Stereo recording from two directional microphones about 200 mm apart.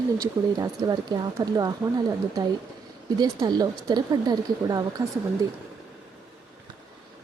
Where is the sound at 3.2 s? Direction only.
20° right (ahead or behind).